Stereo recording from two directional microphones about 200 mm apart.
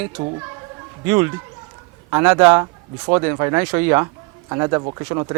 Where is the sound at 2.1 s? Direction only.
15° right (ahead or behind).